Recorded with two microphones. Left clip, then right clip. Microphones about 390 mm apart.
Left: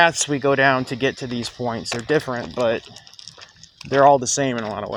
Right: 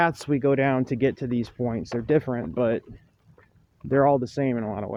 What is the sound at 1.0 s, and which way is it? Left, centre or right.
Speech, right.